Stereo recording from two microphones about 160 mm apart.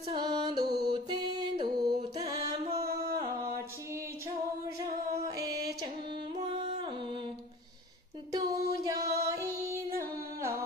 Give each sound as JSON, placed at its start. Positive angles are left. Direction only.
{"t": 0.1, "sound": "music", "side_deg": -25}
{"t": 5.5, "sound": "music", "side_deg": -20}
{"t": 8.3, "sound": "music", "side_deg": -20}